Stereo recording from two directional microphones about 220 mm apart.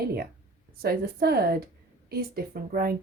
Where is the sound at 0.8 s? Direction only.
45° right (ahead or behind).